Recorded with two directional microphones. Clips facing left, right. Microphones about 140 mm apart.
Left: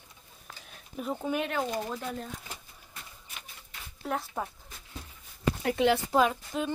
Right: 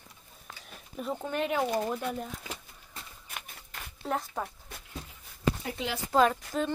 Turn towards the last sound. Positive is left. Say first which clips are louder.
# right 2 dB
turn(degrees=10)  # may be behind; listen again after turning